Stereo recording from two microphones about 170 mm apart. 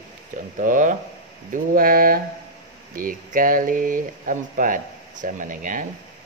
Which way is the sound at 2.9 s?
55° right (ahead or behind).